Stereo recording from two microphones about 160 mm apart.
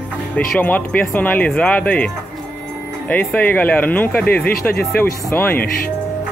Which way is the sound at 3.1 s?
10° left (ahead or behind).